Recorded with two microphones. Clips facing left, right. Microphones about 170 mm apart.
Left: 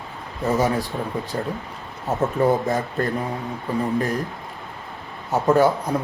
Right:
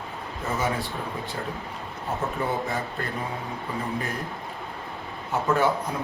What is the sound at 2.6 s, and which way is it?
Speech, 40° left (ahead or behind).